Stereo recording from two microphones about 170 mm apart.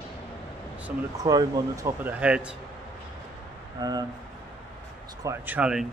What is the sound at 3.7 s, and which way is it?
Speech, 20° right (ahead or behind).